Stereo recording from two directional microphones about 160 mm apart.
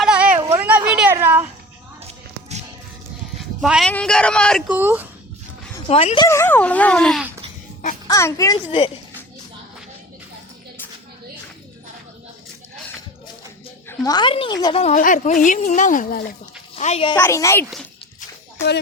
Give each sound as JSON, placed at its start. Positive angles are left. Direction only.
{"t": 0.0, "sound": "a sound", "side_deg": -5}
{"t": 0.3, "sound": "a sound", "side_deg": -20}
{"t": 3.6, "sound": "a man's voice", "side_deg": 0}
{"t": 4.7, "sound": "speech", "side_deg": -10}
{"t": 5.9, "sound": "speech", "side_deg": 40}
{"t": 6.2, "sound": "speech", "side_deg": 15}
{"t": 8.0, "sound": "a woman's voice", "side_deg": 20}
{"t": 13.8, "sound": "a woman's voice", "side_deg": 25}
{"t": 14.8, "sound": "speech", "side_deg": 45}
{"t": 16.7, "sound": "speech", "side_deg": 40}
{"t": 17.2, "sound": "speech", "side_deg": 15}